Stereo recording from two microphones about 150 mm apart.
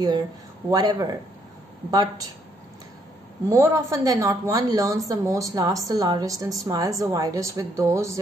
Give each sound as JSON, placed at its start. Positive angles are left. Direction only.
{"t": 0.7, "sound": "a woman's voice", "side_deg": -25}
{"t": 3.4, "sound": "a woman's voice", "side_deg": -20}